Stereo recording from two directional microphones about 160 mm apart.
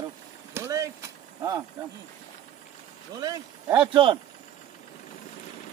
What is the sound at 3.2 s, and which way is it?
Speech, 25° right (ahead or behind).